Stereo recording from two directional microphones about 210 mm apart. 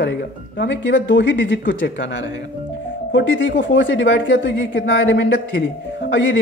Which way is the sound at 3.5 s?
60° left (ahead or behind).